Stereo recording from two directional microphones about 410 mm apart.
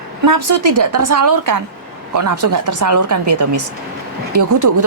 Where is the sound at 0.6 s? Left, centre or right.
Right.